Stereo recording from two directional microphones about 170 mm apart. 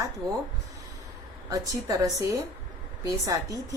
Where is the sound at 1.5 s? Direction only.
20° right (ahead or behind).